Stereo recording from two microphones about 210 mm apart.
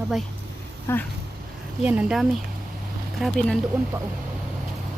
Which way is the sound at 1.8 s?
5° right (ahead or behind).